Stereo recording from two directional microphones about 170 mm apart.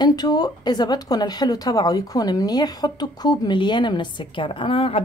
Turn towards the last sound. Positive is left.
turn(degrees=30)  # may be behind; listen again after turning